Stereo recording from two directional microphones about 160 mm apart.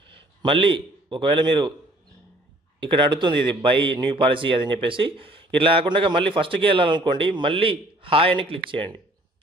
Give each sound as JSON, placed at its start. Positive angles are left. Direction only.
{"t": 0.1, "sound": "a man's voice", "side_deg": -30}
{"t": 2.9, "sound": "speech", "side_deg": -30}